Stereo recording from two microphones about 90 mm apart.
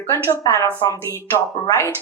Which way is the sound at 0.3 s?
35° left (ahead or behind).